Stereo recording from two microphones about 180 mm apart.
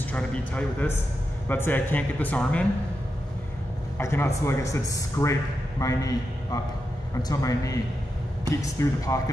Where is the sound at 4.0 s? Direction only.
15° left (ahead or behind).